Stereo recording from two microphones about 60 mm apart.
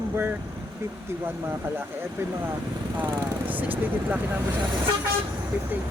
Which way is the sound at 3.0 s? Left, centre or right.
Right.